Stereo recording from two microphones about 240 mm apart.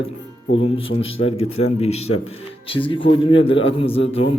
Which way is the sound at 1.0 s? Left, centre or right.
Left.